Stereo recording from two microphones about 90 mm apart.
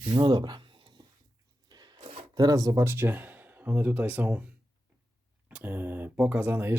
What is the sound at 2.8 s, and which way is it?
Speech, 25° right (ahead or behind).